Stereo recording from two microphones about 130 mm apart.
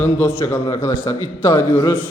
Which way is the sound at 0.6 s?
25° left (ahead or behind).